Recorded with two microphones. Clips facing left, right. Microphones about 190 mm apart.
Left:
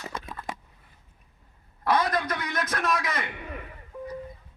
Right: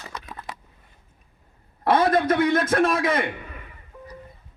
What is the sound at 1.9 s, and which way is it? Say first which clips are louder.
A man's voice: right 6 dB; 25° right (ahead or behind).